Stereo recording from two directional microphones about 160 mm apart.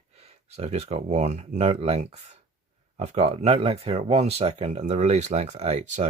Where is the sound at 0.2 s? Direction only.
40° right (ahead or behind).